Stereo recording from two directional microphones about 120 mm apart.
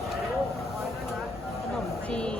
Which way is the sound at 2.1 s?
10° left (ahead or behind).